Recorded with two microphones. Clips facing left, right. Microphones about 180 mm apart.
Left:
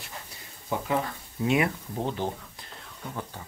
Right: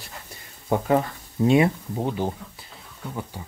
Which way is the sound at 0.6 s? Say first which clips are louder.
Right 7 dB; 50° right (ahead or behind).